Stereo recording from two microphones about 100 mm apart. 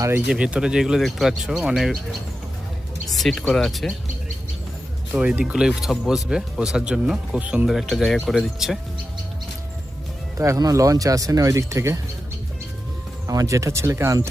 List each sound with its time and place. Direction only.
0.3 s speech: 10° right (ahead or behind)
3.2 s speech: 5° left (ahead or behind)
5.1 s speech: 15° right (ahead or behind)
7.7 s speech: centre (ahead or behind)
10.3 s speech: 30° right (ahead or behind)
13.2 s speech: 35° right (ahead or behind)